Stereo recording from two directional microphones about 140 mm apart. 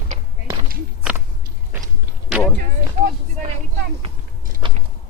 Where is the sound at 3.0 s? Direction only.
60° right (ahead or behind).